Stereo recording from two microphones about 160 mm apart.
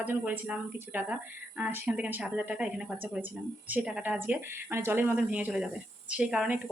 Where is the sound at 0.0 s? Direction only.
10° right (ahead or behind).